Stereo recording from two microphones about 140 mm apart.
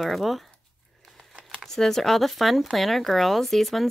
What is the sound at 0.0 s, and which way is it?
Speech, centre (ahead or behind).